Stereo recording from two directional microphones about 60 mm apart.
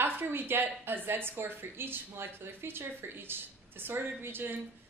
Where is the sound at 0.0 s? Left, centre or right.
Right.